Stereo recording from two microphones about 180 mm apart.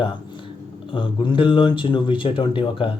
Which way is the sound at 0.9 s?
25° left (ahead or behind).